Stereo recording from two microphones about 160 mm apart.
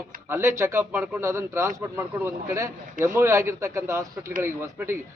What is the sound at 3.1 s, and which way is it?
A man's voice, 15° right (ahead or behind).